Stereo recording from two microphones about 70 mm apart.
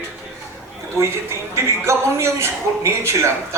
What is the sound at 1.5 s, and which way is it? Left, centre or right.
A man's voice, right.